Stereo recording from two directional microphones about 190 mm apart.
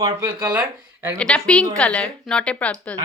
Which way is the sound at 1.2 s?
5° left (ahead or behind).